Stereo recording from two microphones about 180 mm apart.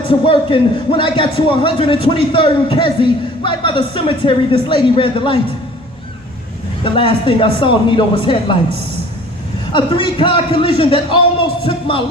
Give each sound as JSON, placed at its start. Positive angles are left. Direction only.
{"t": 0.1, "sound": "a man's voice", "side_deg": 30}
{"t": 6.8, "sound": "a man's voice", "side_deg": 30}
{"t": 9.7, "sound": "a man's voice", "side_deg": 30}